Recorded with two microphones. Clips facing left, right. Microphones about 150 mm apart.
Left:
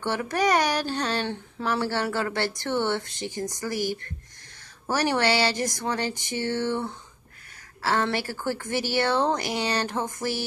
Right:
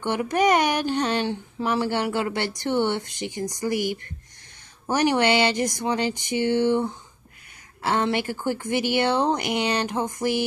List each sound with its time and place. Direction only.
0.0 s speech: 15° right (ahead or behind)